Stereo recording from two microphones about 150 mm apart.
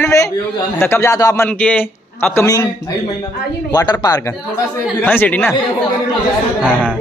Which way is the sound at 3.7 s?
25° left (ahead or behind).